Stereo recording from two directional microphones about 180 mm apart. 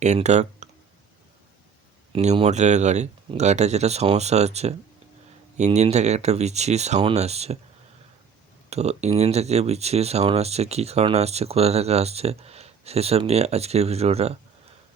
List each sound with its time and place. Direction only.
0.0 s speech: 40° right (ahead or behind)
2.1 s speech: 35° right (ahead or behind)
8.7 s speech: 35° right (ahead or behind)